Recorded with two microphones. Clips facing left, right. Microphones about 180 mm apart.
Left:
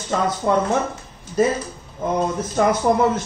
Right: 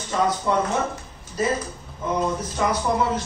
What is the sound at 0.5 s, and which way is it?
Speech, 55° left (ahead or behind).